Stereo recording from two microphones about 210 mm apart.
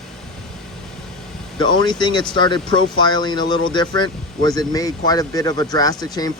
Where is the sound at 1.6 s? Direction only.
20° left (ahead or behind).